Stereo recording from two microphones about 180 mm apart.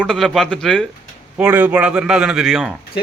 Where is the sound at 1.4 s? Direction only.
10° right (ahead or behind).